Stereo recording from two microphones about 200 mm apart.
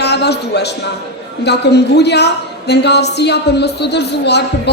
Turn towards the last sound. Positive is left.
turn(degrees=55)  # may be behind; listen again after turning